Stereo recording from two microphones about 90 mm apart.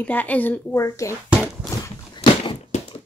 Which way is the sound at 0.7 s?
35° left (ahead or behind).